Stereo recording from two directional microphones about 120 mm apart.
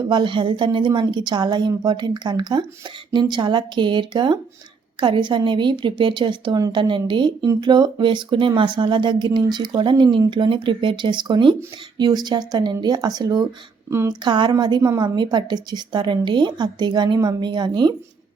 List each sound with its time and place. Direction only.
0.0 s speech: 40° right (ahead or behind)